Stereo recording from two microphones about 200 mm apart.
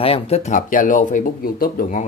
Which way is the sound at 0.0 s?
30° left (ahead or behind).